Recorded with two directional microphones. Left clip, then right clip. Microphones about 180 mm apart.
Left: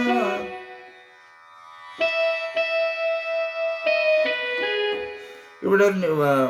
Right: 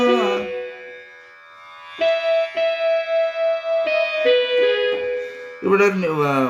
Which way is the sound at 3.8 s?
35° left (ahead or behind).